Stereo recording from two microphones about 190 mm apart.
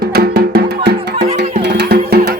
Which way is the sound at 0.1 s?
55° right (ahead or behind).